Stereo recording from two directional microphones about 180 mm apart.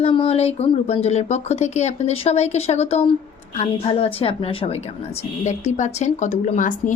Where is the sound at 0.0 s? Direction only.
30° left (ahead or behind).